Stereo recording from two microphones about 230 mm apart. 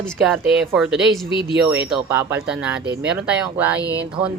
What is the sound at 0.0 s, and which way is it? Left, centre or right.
Speech, centre.